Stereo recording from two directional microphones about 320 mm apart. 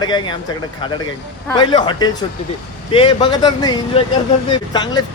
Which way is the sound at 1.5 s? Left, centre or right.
Centre.